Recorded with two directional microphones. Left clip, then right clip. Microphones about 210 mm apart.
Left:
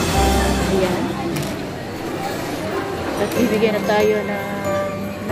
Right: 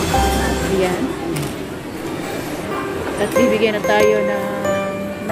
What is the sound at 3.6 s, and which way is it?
Speech, 10° right (ahead or behind).